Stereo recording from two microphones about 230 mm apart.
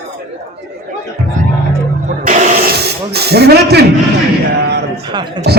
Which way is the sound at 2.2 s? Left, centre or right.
Right.